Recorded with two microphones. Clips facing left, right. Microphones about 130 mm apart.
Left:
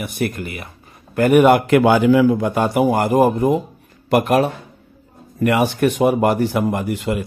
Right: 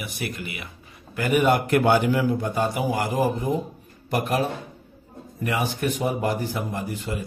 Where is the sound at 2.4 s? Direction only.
75° left (ahead or behind).